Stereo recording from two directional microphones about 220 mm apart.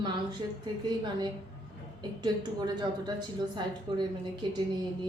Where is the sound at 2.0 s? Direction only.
20° right (ahead or behind).